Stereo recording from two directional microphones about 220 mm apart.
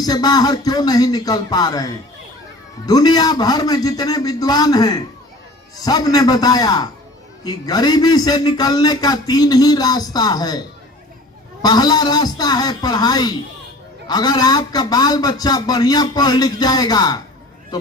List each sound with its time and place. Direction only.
0.0 s a man's voice: 15° left (ahead or behind)
11.6 s a man's voice: 20° left (ahead or behind)